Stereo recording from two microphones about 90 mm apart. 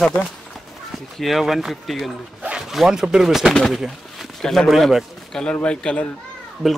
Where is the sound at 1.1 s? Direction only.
Centre (ahead or behind).